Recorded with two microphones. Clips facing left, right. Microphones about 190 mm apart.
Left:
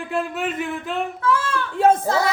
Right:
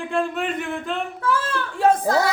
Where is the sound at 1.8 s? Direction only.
20° left (ahead or behind).